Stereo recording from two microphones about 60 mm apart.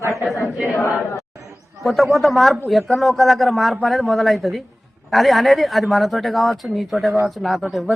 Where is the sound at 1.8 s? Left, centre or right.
Centre.